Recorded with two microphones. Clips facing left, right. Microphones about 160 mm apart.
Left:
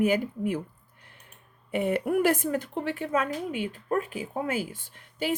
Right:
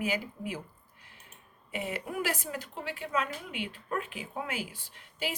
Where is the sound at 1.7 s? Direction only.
55° left (ahead or behind).